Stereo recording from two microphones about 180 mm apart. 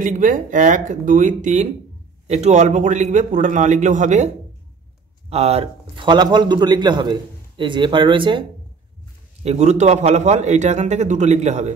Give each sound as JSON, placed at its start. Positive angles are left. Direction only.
{"t": 0.0, "sound": "a man's voice", "side_deg": -45}
{"t": 5.3, "sound": "a man's voice", "side_deg": -35}
{"t": 9.4, "sound": "a man's voice", "side_deg": -35}